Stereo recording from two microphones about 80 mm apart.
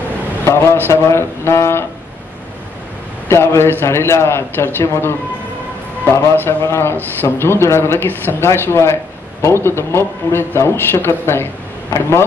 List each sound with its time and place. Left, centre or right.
0.5 s a man's voice: left
3.3 s a man's voice: left